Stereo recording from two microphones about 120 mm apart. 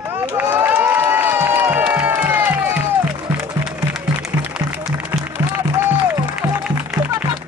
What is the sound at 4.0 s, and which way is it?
Music, 15° right (ahead or behind).